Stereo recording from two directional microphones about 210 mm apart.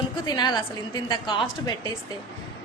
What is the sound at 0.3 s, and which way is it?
Speech, 20° left (ahead or behind).